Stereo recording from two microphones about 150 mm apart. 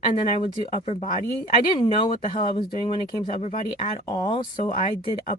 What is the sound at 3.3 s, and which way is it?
Speech, 40° left (ahead or behind).